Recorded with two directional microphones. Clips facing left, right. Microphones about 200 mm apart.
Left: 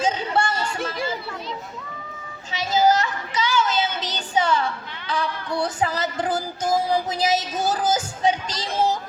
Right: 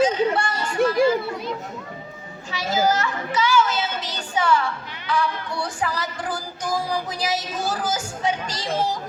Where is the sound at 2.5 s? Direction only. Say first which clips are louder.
Left 2 dB; 20° left (ahead or behind).